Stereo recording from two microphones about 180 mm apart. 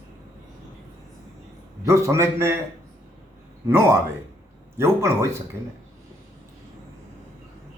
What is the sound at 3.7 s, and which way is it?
A man's voice, 15° right (ahead or behind).